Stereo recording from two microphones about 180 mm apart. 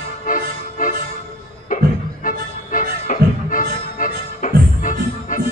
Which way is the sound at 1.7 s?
50° left (ahead or behind).